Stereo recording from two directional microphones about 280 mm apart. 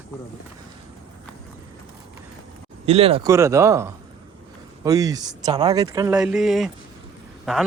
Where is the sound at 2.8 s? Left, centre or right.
Right.